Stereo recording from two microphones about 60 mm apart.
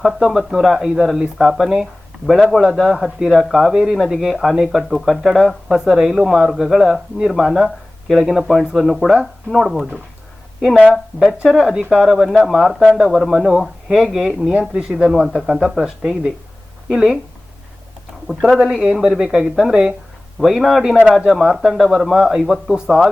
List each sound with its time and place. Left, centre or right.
0.0 s speech: centre
10.9 s speech: centre
18.3 s speech: centre